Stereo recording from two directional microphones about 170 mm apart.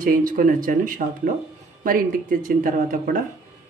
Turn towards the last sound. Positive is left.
turn(degrees=-55)  # may be behind; listen again after turning